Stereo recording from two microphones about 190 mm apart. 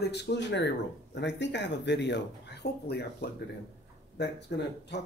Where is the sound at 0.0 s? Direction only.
60° left (ahead or behind).